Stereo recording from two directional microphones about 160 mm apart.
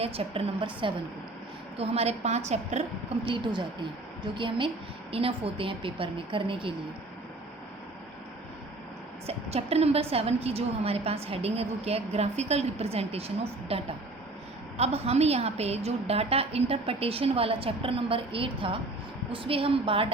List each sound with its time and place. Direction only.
0.0 s a woman's voice: 35° right (ahead or behind)
3.2 s a woman's voice: 30° right (ahead or behind)
9.2 s a woman's voice: 40° right (ahead or behind)